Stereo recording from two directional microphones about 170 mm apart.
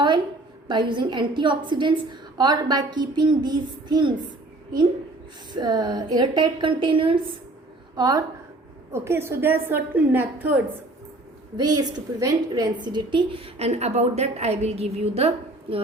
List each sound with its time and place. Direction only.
0.7 s a child's voice: 30° right (ahead or behind)
5.5 s a child's voice: 25° right (ahead or behind)
11.5 s a woman's voice: 25° right (ahead or behind)